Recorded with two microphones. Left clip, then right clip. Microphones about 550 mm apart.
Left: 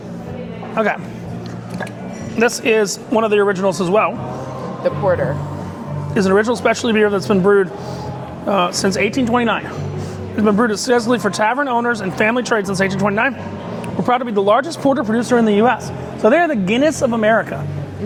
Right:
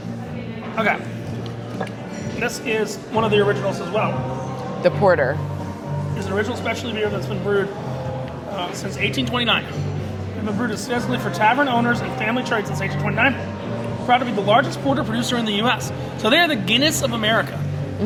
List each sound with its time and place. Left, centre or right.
2.4 s speech: left
4.8 s speech: right
6.1 s speech: left
9.1 s speech: left
10.6 s speech: left